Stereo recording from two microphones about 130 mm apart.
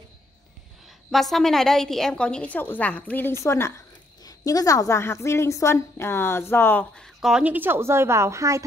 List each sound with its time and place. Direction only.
1.1 s a woman's voice: centre (ahead or behind)
7.2 s a woman's voice: 5° right (ahead or behind); by 8.6 s 25° right (ahead or behind)